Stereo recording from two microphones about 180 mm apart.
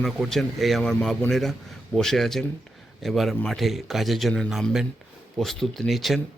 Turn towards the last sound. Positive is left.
turn(degrees=0)  # may be behind; listen again after turning